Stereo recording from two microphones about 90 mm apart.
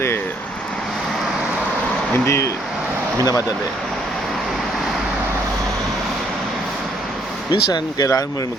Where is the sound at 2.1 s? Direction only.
30° left (ahead or behind).